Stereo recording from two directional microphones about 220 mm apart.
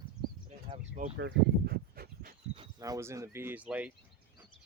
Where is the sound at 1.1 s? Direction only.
50° right (ahead or behind).